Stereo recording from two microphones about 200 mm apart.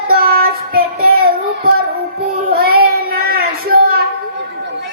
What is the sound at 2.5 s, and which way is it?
Child singing, 50° right (ahead or behind).